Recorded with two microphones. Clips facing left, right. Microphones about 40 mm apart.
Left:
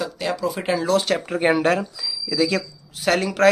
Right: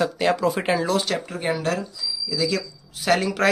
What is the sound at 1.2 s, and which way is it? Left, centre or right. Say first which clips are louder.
Speech: left 6 dB; left.